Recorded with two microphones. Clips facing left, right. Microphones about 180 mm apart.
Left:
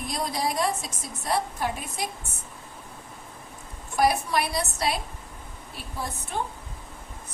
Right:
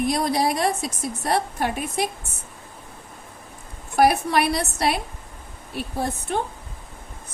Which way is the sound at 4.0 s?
70° right (ahead or behind).